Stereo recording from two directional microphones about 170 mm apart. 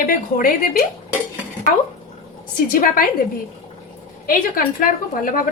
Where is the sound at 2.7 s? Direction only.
55° left (ahead or behind).